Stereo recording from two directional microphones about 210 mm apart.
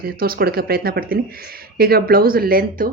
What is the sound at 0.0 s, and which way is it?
Speech, 45° right (ahead or behind).